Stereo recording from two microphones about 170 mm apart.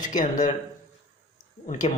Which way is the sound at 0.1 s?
50° left (ahead or behind).